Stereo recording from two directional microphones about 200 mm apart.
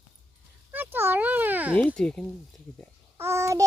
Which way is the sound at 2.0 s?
5° left (ahead or behind).